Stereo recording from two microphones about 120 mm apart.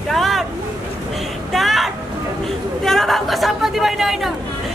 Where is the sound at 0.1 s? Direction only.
Centre (ahead or behind).